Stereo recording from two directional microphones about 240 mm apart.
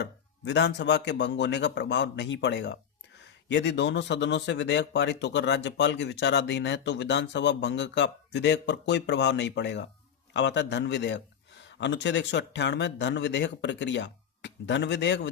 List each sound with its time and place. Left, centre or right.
0.0 s speech: left